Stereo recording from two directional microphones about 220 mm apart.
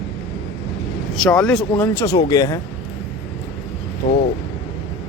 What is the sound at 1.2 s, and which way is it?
Speech, 5° left (ahead or behind).